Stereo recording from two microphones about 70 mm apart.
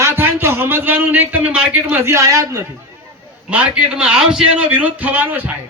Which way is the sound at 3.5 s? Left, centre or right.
Centre.